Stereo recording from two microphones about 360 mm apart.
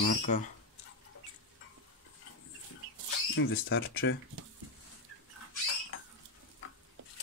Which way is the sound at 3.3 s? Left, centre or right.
Left.